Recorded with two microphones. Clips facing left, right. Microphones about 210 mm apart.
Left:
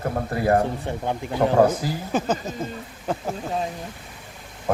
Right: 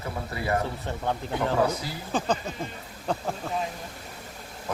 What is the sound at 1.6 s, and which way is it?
Speech, 50° left (ahead or behind).